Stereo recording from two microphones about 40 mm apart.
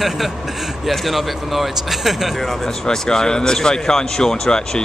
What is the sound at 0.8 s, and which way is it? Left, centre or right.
Speech, centre.